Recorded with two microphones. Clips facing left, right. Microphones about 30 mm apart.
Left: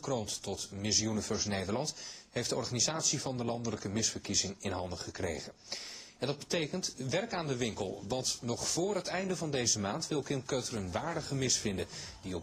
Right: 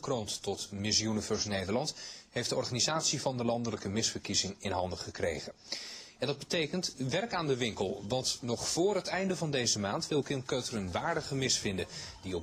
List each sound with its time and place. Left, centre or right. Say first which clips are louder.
0.0 s speech: right 1 dB; centre
1.0 s speech: right 1 dB; centre
9.5 s speech: right 1 dB; centre
11.6 s speech: right 1 dB; centre